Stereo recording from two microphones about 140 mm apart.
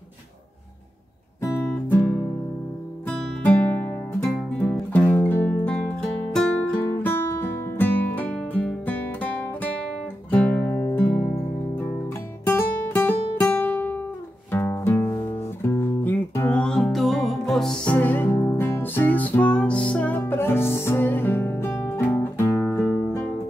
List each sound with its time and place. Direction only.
3.4 s music: 10° left (ahead or behind)
22.7 s music: 5° left (ahead or behind)